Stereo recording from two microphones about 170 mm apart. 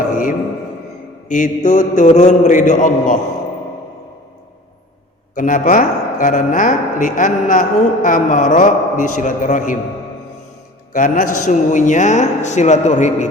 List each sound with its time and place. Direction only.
1.3 s speech: 45° left (ahead or behind)
5.3 s speech: 50° left (ahead or behind)
10.9 s speech: 50° left (ahead or behind)